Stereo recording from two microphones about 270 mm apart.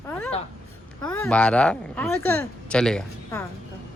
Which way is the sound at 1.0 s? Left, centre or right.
Centre.